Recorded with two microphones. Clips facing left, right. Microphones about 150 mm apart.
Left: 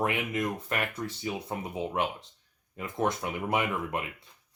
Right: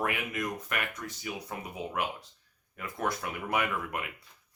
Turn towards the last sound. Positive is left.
turn(degrees=25)  # may be behind; listen again after turning